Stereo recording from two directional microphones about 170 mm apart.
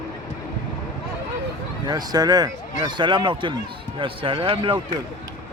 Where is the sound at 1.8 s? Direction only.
25° right (ahead or behind).